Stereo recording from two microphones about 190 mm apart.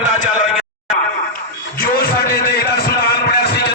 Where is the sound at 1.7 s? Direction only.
50° left (ahead or behind).